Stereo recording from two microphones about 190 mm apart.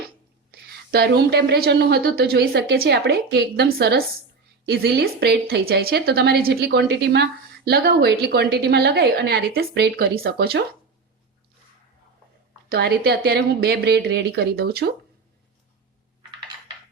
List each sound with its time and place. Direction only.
0.9 s a woman's voice: 55° right (ahead or behind)
12.6 s a woman's voice: 55° right (ahead or behind)